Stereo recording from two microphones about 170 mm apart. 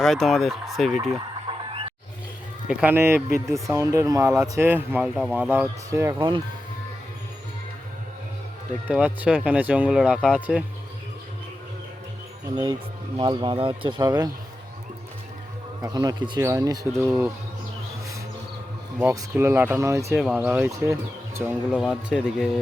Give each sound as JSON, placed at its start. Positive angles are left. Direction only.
{"t": 0.0, "sound": "speech", "side_deg": 0}
{"t": 1.5, "sound": "a sound", "side_deg": -35}
{"t": 2.6, "sound": "speech", "side_deg": -10}
{"t": 3.5, "sound": "speech", "side_deg": -20}
{"t": 6.1, "sound": "speech", "side_deg": -30}
{"t": 8.9, "sound": "speech", "side_deg": -10}
{"t": 13.1, "sound": "speech", "side_deg": -25}
{"t": 15.8, "sound": "speech", "side_deg": -20}
{"t": 18.9, "sound": "speech", "side_deg": -15}
{"t": 20.1, "sound": "speech", "side_deg": -5}